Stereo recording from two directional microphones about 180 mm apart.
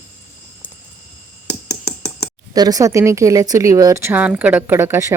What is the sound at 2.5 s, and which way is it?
Speech, 20° right (ahead or behind).